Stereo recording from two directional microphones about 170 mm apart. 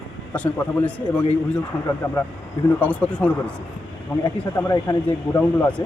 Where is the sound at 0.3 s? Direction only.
10° left (ahead or behind).